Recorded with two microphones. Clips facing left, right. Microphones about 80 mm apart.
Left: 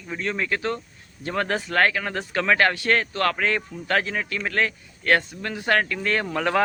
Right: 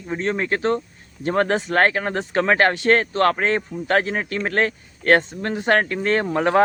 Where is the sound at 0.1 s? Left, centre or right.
Right.